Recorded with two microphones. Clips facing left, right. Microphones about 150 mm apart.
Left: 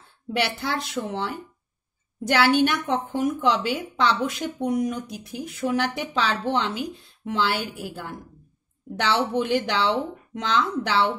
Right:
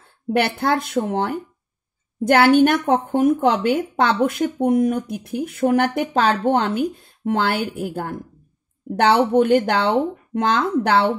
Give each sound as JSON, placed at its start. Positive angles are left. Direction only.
{"t": 0.3, "sound": "a woman's voice", "side_deg": -55}